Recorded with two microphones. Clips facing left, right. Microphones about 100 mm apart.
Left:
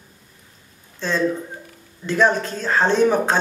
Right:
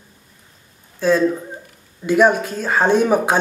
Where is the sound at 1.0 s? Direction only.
10° right (ahead or behind).